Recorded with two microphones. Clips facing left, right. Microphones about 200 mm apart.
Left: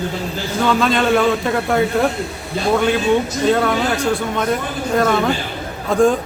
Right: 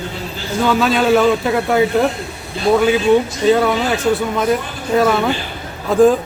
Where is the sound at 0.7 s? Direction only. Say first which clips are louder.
Right 2 dB; 5° right (ahead or behind).